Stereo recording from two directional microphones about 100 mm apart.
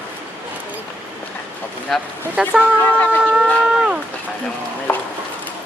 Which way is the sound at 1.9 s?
5° left (ahead or behind).